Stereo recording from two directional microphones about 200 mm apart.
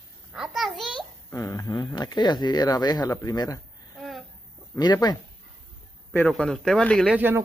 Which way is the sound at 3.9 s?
Centre (ahead or behind).